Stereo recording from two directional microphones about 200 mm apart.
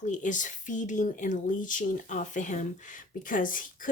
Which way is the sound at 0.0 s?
40° left (ahead or behind).